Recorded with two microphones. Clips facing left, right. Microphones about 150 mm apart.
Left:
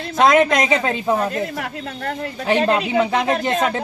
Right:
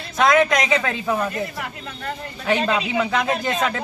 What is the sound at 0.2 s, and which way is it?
Speech, 30° left (ahead or behind).